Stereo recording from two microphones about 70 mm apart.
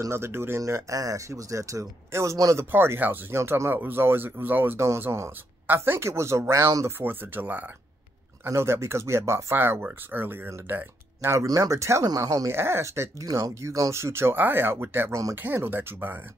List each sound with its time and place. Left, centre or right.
0.1 s speech: right
0.6 s speech: right
2.7 s speech: right
4.7 s speech: right
7.0 s speech: right
8.5 s speech: right
11.3 s speech: right
12.1 s speech: right
12.5 s speech: right